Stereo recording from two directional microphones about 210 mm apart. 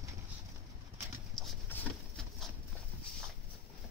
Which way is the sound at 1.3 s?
5° left (ahead or behind).